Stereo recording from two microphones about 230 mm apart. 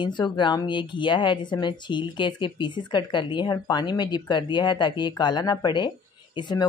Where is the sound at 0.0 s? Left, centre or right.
Left.